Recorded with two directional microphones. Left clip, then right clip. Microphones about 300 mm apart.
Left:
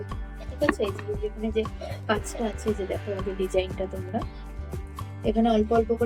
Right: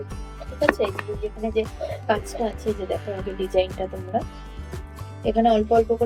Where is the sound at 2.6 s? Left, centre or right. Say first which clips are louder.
Right 3 dB; centre.